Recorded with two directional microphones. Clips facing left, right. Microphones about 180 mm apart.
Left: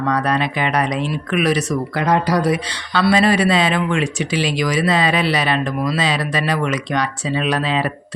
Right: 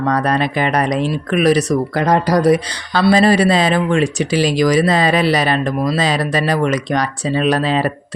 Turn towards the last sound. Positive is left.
turn(degrees=-40)  # may be behind; listen again after turning